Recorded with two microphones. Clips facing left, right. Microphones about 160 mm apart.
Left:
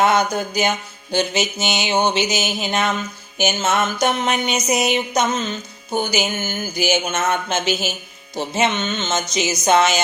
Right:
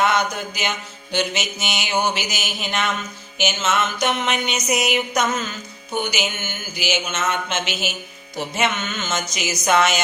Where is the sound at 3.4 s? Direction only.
40° left (ahead or behind); by 5.9 s 20° left (ahead or behind).